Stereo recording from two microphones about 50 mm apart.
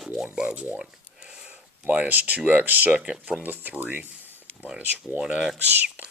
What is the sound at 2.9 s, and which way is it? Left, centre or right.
Speech, right.